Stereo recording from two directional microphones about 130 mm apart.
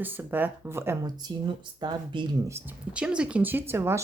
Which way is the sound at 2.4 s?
20° right (ahead or behind).